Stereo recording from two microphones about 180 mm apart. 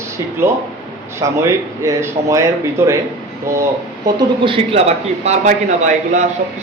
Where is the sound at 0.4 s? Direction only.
15° right (ahead or behind).